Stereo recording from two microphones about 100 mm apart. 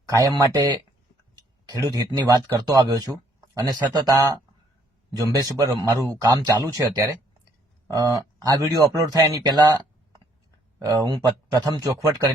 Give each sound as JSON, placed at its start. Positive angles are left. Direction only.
{"t": 0.1, "sound": "a man's voice", "side_deg": -35}